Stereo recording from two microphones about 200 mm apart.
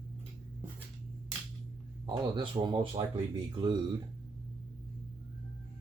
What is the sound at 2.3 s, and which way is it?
Speech, 25° right (ahead or behind).